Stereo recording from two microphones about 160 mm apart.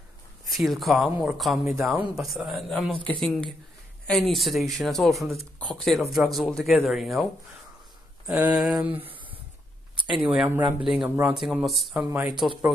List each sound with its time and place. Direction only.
0.5 s speech: centre (ahead or behind)
8.4 s speech: 5° right (ahead or behind)
9.9 s a sound: 30° right (ahead or behind)
10.2 s speech: 5° right (ahead or behind)
12.4 s speech: centre (ahead or behind)